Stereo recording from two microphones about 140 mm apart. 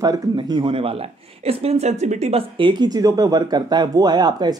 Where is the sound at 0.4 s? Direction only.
35° right (ahead or behind).